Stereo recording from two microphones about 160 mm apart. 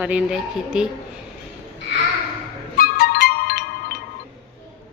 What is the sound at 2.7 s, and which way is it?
Music, 65° left (ahead or behind).